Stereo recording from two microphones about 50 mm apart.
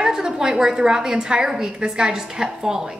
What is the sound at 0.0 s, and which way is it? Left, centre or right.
A woman's voice, centre.